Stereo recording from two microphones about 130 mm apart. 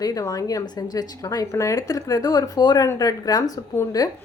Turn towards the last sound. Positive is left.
turn(degrees=30)  # may be behind; listen again after turning